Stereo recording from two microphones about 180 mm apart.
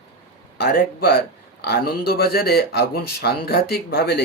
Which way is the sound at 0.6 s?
60° left (ahead or behind).